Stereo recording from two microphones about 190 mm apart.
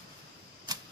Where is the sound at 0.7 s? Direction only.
20° right (ahead or behind).